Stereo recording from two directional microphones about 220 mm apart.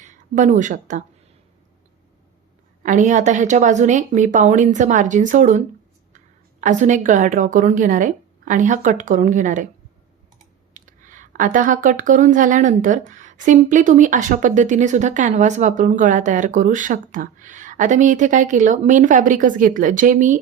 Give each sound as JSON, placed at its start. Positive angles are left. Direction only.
{"t": 0.3, "sound": "speech", "side_deg": -35}
{"t": 2.8, "sound": "a woman's voice", "side_deg": -35}
{"t": 10.8, "sound": "speech", "side_deg": -35}